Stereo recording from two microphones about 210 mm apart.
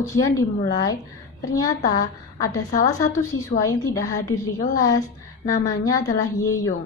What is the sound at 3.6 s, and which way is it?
Speech, 15° left (ahead or behind).